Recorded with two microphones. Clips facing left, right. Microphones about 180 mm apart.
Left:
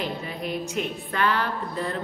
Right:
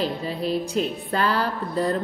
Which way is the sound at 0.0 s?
30° right (ahead or behind).